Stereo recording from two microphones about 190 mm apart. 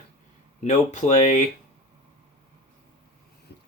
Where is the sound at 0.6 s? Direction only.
40° left (ahead or behind).